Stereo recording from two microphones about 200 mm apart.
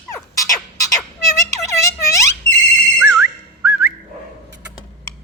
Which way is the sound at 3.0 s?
10° right (ahead or behind).